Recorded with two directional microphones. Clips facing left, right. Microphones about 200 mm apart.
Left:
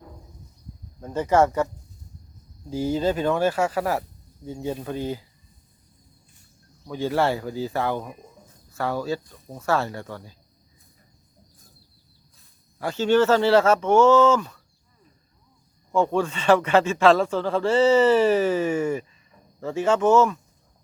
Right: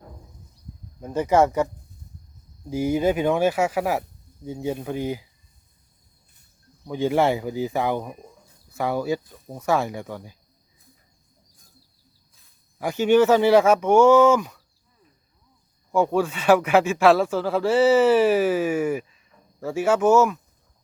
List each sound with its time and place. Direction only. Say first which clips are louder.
1.0 s speech: right 1 dB; 10° right (ahead or behind)
2.6 s speech: right 2 dB; 15° right (ahead or behind)
6.8 s speech: right 2 dB; 15° right (ahead or behind)
9.2 s speech: right 2 dB; centre (ahead or behind)
9.6 s speech: right 1 dB; 15° right (ahead or behind)
12.8 s speech: right 2 dB; 15° right (ahead or behind)
15.9 s speech: right 1 dB; 10° right (ahead or behind)